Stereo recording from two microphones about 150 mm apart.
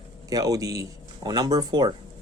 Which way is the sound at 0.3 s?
25° right (ahead or behind).